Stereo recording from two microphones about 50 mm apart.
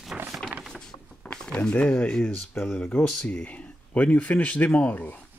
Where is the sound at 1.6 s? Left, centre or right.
Left.